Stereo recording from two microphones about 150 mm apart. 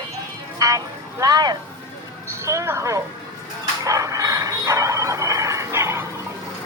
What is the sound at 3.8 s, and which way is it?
Music, 20° right (ahead or behind).